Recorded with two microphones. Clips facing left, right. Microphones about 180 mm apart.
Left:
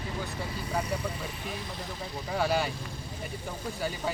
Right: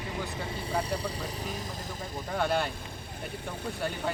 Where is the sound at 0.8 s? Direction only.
35° right (ahead or behind).